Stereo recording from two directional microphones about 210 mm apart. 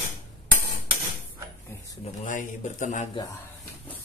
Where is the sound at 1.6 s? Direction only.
15° left (ahead or behind).